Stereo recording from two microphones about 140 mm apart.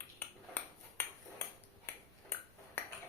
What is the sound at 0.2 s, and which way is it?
Ping, 15° left (ahead or behind).